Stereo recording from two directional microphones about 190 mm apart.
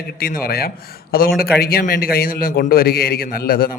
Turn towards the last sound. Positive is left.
turn(degrees=50)  # may be behind; listen again after turning